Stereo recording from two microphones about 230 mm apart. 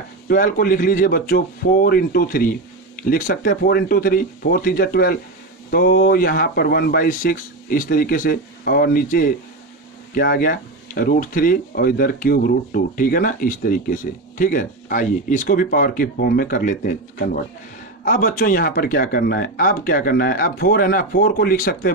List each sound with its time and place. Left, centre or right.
0.3 s speech: left